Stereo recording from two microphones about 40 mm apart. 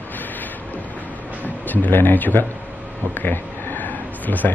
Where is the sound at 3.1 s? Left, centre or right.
Left.